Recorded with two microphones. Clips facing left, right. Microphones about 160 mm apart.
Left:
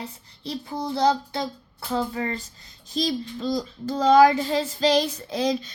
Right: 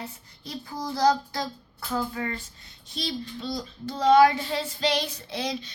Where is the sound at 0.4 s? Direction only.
25° left (ahead or behind).